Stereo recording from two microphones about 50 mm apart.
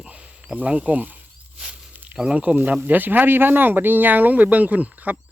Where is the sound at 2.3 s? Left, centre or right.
Right.